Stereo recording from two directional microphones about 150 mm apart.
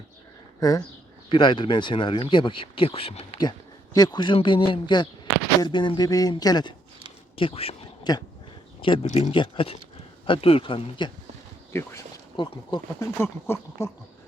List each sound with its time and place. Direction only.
1.3 s speech: 30° left (ahead or behind)
3.9 s speech: 25° left (ahead or behind)
7.3 s speech: 40° left (ahead or behind)
8.1 s speech: 30° left (ahead or behind)
9.0 s speech: 50° left (ahead or behind)
9.3 s speech: 35° left (ahead or behind)
11.7 s speech: 15° left (ahead or behind)
12.4 s speech: 30° left (ahead or behind)
13.0 s speech: 15° left (ahead or behind)